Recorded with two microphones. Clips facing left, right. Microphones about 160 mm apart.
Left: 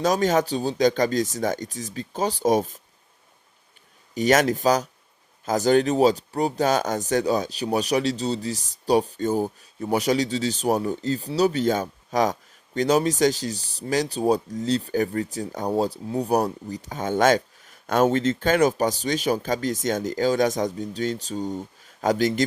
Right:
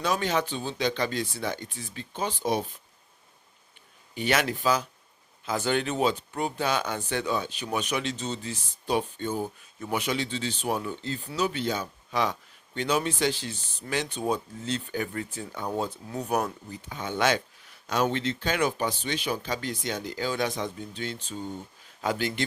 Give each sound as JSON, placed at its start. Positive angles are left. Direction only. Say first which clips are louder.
{"t": 0.0, "sound": "speech", "louder": "left 6 dB", "side_deg": 40}
{"t": 4.1, "sound": "speech", "louder": "left 7 dB", "side_deg": 40}